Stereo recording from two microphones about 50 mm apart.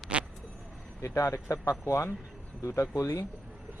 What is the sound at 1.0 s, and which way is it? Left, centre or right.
Speech, left.